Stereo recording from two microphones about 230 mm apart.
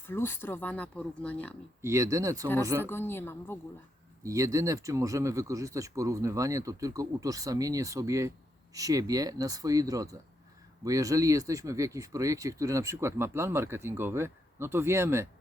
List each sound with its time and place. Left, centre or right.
0.1 s speech: centre
1.8 s speech: centre
2.8 s speech: centre
4.2 s speech: centre